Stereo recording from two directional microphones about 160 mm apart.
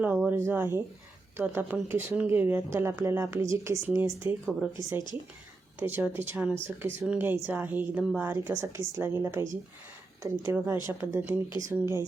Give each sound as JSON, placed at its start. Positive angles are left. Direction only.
{"t": 0.0, "sound": "a woman's voice", "side_deg": -10}
{"t": 5.8, "sound": "a woman's voice", "side_deg": -15}